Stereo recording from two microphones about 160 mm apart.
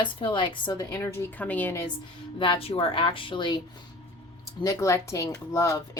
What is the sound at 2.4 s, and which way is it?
A woman's voice, 35° left (ahead or behind).